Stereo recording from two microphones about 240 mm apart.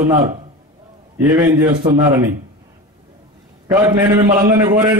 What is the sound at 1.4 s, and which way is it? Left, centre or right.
Speech, centre.